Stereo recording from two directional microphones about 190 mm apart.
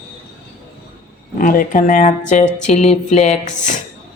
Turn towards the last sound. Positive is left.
turn(degrees=40)  # may be behind; listen again after turning